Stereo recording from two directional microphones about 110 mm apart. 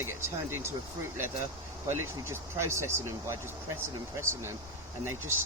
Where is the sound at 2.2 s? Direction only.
25° right (ahead or behind).